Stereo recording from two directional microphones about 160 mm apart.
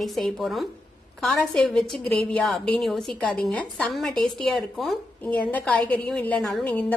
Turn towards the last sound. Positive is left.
turn(degrees=10)  # may be behind; listen again after turning